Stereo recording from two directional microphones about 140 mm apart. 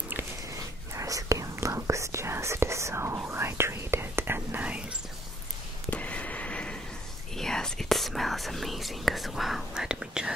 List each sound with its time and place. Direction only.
0.6 s whispering: 25° right (ahead or behind); by 4.9 s 10° right (ahead or behind)
5.9 s a sound: 10° left (ahead or behind)
7.3 s whispering: 5° left (ahead or behind)